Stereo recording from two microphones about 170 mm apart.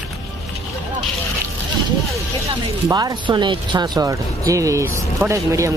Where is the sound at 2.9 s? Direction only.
25° right (ahead or behind).